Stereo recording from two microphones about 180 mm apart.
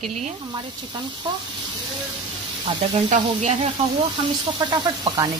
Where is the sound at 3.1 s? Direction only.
45° right (ahead or behind).